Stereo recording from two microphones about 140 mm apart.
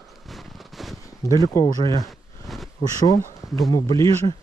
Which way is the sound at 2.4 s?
Centre (ahead or behind).